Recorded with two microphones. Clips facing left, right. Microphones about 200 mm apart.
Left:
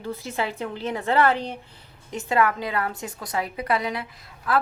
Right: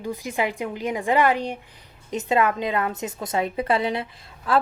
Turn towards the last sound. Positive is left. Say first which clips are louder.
# right 2 dB
turn(degrees=-30)  # may be behind; listen again after turning